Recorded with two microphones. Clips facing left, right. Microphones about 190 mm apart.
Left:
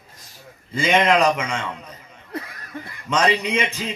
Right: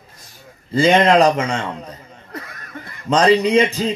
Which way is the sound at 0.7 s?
35° right (ahead or behind).